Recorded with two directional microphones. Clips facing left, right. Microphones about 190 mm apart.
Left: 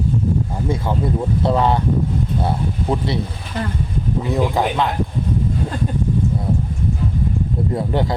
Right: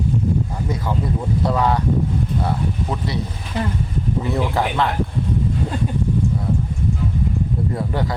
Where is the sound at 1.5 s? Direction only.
25° left (ahead or behind).